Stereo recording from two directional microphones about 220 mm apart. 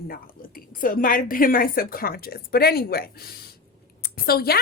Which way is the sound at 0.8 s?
40° left (ahead or behind).